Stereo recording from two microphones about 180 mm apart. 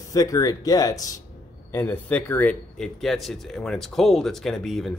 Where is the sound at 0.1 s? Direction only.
20° left (ahead or behind).